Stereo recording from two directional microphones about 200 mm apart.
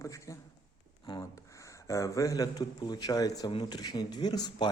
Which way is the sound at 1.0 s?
20° left (ahead or behind).